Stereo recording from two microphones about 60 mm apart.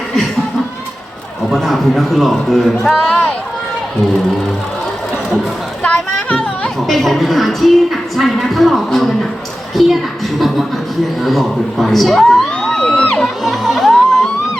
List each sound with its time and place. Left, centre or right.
1.5 s speech: centre
5.8 s speech: left
6.3 s music: centre
6.8 s speech: centre
11.2 s speech: centre
13.4 s music: centre